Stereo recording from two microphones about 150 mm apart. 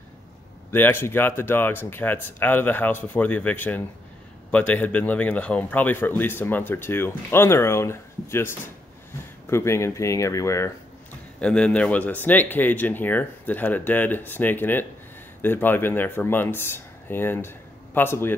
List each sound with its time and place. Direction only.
0.7 s speech: 15° left (ahead or behind)
11.4 s speech: 5° left (ahead or behind)